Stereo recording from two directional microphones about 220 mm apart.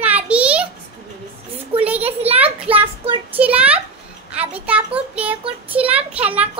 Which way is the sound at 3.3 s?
5° right (ahead or behind).